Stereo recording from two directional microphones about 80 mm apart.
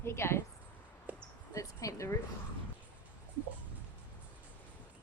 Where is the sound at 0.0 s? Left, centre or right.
Left.